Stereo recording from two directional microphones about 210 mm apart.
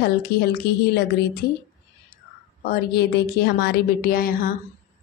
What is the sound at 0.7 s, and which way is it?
Speech, 50° left (ahead or behind).